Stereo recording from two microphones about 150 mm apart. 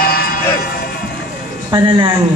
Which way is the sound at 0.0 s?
80° left.